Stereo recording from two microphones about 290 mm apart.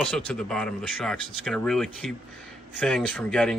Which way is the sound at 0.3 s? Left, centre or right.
Centre.